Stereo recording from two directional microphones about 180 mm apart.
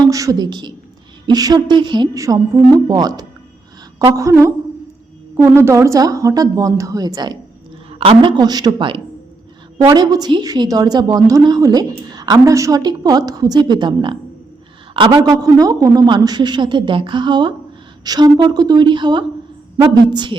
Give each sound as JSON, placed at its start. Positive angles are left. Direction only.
{"t": 0.0, "sound": "a woman's voice", "side_deg": -20}